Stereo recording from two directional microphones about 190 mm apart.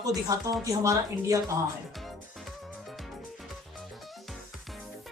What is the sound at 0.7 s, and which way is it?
Speech, 15° right (ahead or behind).